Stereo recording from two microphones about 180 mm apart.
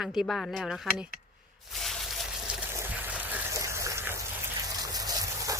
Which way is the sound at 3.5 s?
15° right (ahead or behind).